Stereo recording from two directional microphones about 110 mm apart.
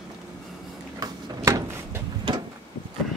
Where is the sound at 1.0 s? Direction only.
30° right (ahead or behind).